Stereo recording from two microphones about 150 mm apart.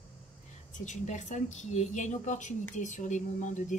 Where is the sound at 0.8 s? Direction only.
50° left (ahead or behind).